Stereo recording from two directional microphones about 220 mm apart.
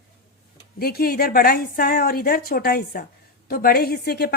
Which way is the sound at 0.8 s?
45° left (ahead or behind).